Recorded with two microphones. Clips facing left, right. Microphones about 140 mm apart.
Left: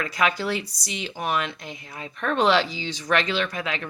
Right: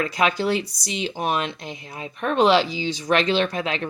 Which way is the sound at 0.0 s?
25° right (ahead or behind).